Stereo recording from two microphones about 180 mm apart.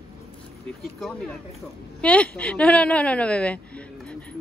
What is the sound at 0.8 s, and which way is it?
A child's voice, centre (ahead or behind).